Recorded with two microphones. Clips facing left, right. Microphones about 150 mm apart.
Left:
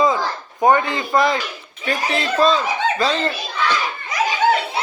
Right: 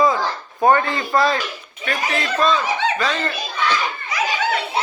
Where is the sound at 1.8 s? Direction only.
30° left (ahead or behind).